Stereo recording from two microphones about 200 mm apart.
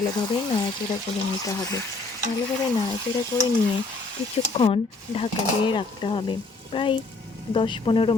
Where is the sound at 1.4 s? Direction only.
20° left (ahead or behind).